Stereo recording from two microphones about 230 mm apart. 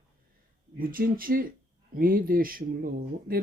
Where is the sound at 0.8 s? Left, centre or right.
Right.